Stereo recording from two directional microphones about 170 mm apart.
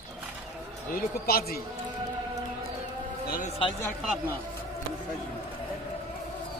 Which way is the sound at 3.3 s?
55° left (ahead or behind).